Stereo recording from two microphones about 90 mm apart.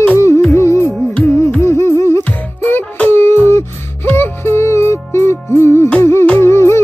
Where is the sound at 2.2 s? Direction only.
20° left (ahead or behind).